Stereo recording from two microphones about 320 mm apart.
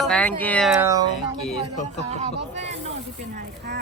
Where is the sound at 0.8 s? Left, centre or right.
Centre.